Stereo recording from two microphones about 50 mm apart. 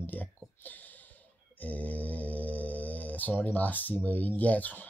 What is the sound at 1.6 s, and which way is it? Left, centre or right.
Mantra, left.